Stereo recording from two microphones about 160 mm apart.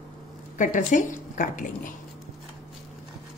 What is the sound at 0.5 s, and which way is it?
Speech, 55° left (ahead or behind).